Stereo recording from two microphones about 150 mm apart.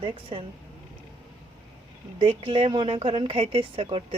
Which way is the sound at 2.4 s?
35° right (ahead or behind).